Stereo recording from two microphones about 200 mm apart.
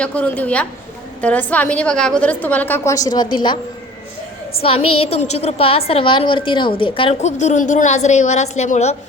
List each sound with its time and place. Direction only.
0.0 s a woman's voice: 5° left (ahead or behind); by 3.6 s 25° left (ahead or behind)
4.6 s a woman's voice: 30° left (ahead or behind)